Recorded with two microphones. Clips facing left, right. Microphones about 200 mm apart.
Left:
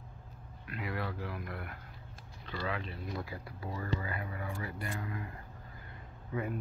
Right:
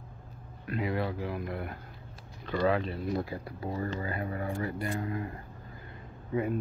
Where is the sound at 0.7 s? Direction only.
25° right (ahead or behind).